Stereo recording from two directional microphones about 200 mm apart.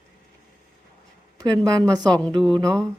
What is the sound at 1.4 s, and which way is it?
Speech, 20° right (ahead or behind).